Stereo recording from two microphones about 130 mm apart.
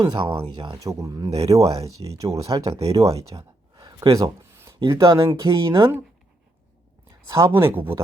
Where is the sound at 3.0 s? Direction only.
25° right (ahead or behind).